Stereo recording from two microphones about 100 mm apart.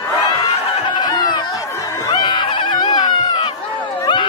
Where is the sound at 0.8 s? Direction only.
45° left (ahead or behind).